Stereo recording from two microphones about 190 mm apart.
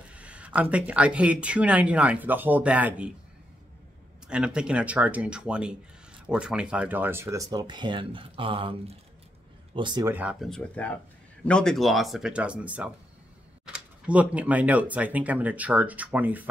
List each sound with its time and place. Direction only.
0.1 s speech: 5° right (ahead or behind)
4.3 s speech: 5° right (ahead or behind); by 10.0 s 25° right (ahead or behind)
10.0 s speech: 10° right (ahead or behind)
10.5 s speech: 5° left (ahead or behind)